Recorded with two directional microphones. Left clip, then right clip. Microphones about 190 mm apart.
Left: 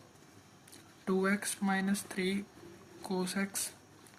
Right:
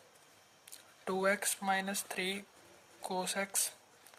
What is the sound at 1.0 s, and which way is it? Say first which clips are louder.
Speech: even; 50° right (ahead or behind).